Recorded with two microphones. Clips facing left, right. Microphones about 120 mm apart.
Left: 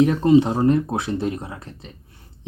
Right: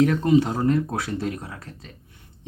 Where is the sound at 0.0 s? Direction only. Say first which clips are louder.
Left 3 dB; 25° left (ahead or behind).